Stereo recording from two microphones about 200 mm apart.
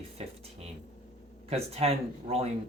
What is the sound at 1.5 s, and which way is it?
Speech, 30° right (ahead or behind).